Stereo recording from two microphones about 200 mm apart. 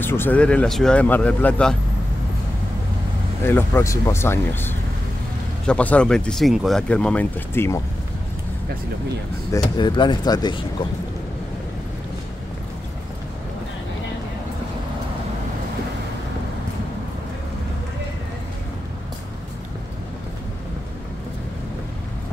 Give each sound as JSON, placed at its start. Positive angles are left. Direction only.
{"t": 0.0, "sound": "speech", "side_deg": 10}
{"t": 3.4, "sound": "speech", "side_deg": 10}
{"t": 9.8, "sound": "speech", "side_deg": 25}